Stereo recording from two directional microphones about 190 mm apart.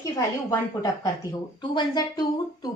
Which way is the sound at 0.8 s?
20° left (ahead or behind).